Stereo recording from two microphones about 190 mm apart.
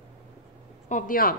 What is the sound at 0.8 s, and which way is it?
Speech, 45° left (ahead or behind).